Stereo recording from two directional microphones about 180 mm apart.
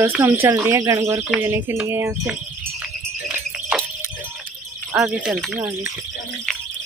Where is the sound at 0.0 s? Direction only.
10° right (ahead or behind).